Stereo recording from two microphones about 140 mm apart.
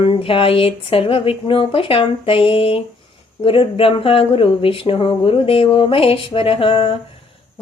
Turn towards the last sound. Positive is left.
turn(degrees=40)  # may be behind; listen again after turning